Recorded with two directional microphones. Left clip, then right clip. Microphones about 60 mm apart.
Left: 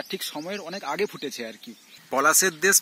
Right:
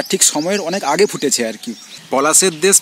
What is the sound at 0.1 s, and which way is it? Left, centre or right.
Speech, centre.